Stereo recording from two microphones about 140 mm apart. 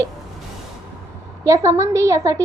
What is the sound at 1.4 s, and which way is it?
Speech, 20° right (ahead or behind).